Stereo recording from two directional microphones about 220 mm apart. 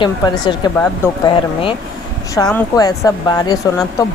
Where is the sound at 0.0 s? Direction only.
20° left (ahead or behind).